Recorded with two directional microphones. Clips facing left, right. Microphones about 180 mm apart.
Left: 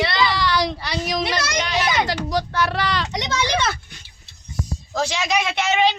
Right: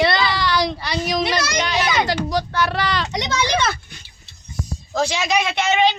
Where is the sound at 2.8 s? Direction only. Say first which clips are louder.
Right 1 dB; 45° right (ahead or behind).